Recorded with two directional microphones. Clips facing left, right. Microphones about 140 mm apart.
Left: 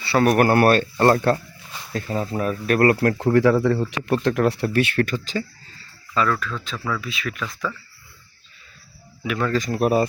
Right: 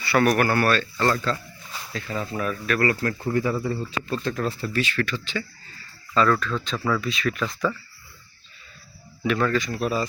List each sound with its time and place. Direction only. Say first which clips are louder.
0.0 s speech: left 2 dB; 30° left (ahead or behind)
0.3 s speech: left 5 dB; 50° left (ahead or behind)
1.9 s speech: left 5 dB; 40° left (ahead or behind)
2.7 s speech: left 7 dB; 60° left (ahead or behind)
3.3 s speech: left 9 dB; 90° left; by 5.5 s 40° left (ahead or behind)
6.1 s speech: right 2 dB; 5° left (ahead or behind)
9.2 s speech: right 2 dB; 10° left (ahead or behind)
9.5 s speech: left 5 dB; 40° left (ahead or behind)